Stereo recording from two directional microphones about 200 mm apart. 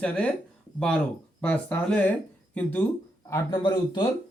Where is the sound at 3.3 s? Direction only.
20° left (ahead or behind).